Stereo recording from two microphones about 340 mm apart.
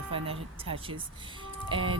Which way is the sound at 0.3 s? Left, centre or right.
Centre.